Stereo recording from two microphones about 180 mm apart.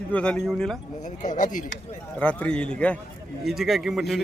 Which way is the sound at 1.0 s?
45° left (ahead or behind).